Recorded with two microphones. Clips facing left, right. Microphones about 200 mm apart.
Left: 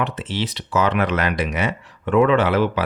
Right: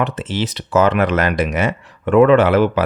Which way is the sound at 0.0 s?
45° right (ahead or behind).